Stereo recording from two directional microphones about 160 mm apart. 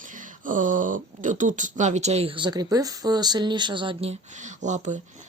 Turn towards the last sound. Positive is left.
turn(degrees=-50)  # may be behind; listen again after turning